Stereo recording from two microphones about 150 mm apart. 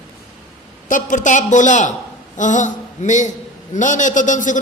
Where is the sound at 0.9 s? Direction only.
60° left (ahead or behind).